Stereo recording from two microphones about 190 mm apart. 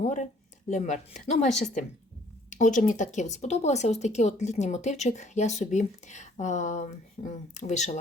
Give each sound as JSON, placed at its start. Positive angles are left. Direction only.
{"t": 0.0, "sound": "speech", "side_deg": 40}